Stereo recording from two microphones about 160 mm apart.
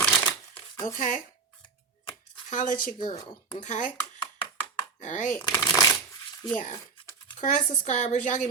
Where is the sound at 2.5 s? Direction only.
55° left (ahead or behind).